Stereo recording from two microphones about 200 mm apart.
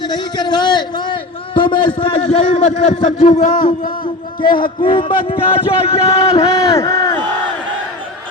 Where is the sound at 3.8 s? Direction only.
45° left (ahead or behind).